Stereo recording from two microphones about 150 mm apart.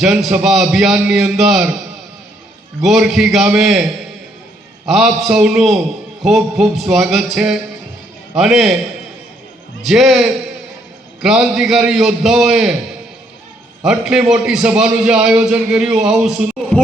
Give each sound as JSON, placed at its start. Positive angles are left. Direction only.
{"t": 0.0, "sound": "a man's voice", "side_deg": -5}
{"t": 2.8, "sound": "a man's voice", "side_deg": 0}
{"t": 4.9, "sound": "a man's voice", "side_deg": 0}
{"t": 9.8, "sound": "a man's voice", "side_deg": 0}
{"t": 13.8, "sound": "a man's voice", "side_deg": -5}